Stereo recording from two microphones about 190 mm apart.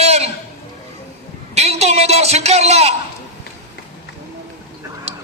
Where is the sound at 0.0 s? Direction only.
35° right (ahead or behind).